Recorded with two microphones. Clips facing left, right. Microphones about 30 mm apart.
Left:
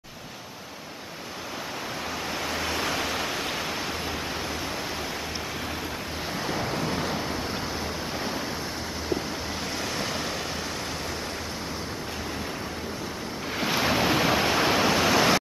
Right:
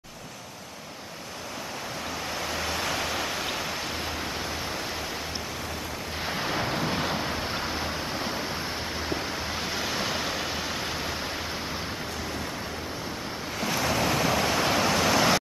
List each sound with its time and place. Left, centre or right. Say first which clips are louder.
2.5 s waves: left 1 dB; centre
6.3 s waves: right 1 dB; centre
9.9 s vehicle: right 1 dB; centre
13.6 s waves: left 2 dB; left